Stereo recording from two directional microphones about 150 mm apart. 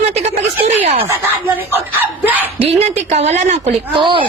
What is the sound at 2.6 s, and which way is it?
A woman's voice, 40° right (ahead or behind).